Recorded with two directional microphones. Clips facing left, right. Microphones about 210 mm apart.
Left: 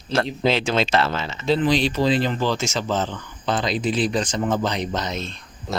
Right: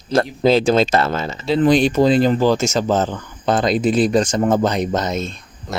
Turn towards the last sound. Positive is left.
turn(degrees=-45)  # may be behind; listen again after turning